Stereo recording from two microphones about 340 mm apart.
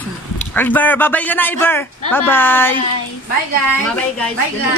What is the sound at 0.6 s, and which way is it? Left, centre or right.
A man's voice, centre.